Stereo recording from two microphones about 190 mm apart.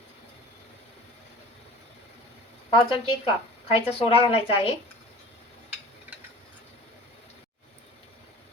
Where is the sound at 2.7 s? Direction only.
25° left (ahead or behind).